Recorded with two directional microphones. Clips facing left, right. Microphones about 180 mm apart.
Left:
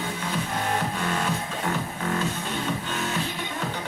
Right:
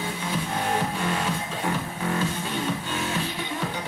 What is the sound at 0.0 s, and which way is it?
Music, 10° right (ahead or behind).